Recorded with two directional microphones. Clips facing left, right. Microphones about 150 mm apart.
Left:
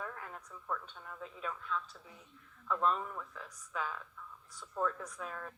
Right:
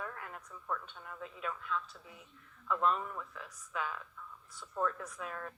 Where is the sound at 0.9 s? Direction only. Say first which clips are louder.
Right 1 dB; 35° left (ahead or behind).